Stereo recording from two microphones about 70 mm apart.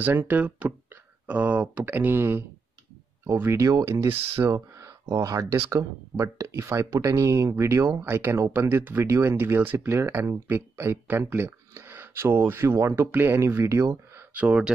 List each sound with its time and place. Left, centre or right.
0.0 s speech: right
3.5 s speech: right
14.3 s speech: centre